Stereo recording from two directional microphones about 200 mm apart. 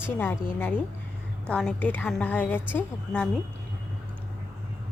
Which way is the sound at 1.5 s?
5° left (ahead or behind).